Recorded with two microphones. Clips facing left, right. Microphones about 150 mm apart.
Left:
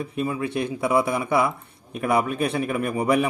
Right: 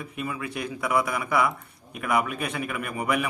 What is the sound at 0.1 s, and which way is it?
A man's voice, 30° left (ahead or behind).